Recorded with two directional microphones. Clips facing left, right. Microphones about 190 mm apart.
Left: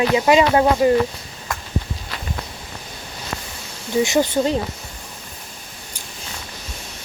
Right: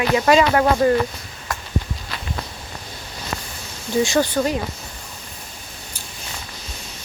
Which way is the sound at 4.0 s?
20° left (ahead or behind).